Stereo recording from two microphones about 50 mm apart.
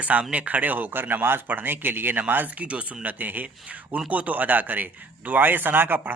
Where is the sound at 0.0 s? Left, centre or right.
Right.